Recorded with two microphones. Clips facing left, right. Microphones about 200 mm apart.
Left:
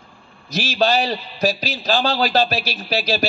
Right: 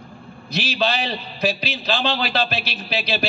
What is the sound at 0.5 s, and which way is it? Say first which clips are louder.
A man's voice: left 4 dB; 45° left (ahead or behind).